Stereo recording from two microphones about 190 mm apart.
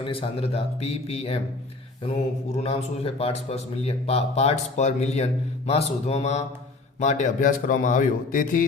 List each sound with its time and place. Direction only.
0.0 s a man's voice: 30° left (ahead or behind)
2.6 s a man's voice: 30° left (ahead or behind)